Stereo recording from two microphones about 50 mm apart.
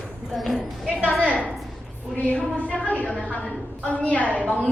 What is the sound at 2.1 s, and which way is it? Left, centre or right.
Music, left.